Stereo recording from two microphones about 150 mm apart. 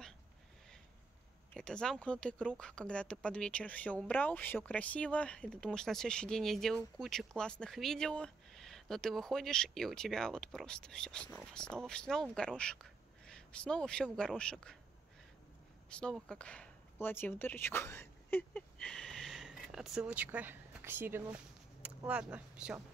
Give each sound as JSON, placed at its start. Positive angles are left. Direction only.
{"t": 1.5, "sound": "speech", "side_deg": 5}
{"t": 15.9, "sound": "speech", "side_deg": 5}